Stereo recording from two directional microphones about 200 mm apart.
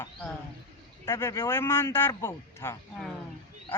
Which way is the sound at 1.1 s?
15° left (ahead or behind).